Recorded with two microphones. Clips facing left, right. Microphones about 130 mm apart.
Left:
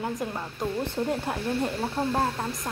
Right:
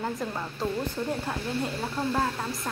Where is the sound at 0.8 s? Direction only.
25° left (ahead or behind).